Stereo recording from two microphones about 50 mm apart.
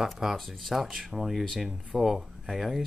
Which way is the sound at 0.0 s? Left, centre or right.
Centre.